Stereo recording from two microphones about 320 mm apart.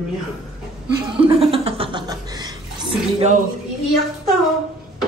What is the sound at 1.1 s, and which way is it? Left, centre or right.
Chuckle, centre.